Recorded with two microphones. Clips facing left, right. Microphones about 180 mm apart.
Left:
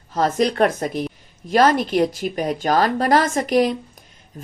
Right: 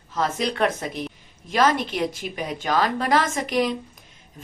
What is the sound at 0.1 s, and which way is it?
Speech, 40° left (ahead or behind).